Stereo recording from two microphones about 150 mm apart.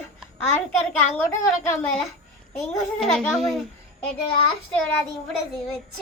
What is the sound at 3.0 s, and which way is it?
Speech, centre (ahead or behind).